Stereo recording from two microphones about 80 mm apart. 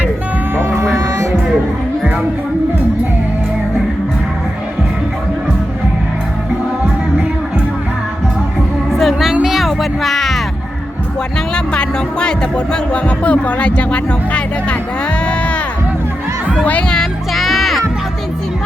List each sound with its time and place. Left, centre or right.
0.5 s hum: right
8.9 s music: centre
11.5 s speech: centre
16.6 s speech: centre
17.0 s music: centre